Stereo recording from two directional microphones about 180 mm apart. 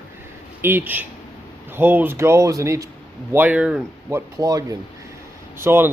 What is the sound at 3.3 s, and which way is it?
Speech, 10° right (ahead or behind).